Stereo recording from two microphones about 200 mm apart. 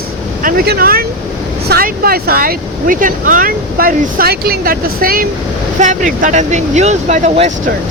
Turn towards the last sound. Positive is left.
turn(degrees=-35)  # may be behind; listen again after turning